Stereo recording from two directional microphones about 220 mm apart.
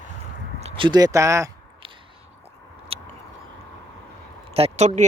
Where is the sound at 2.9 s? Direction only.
25° right (ahead or behind).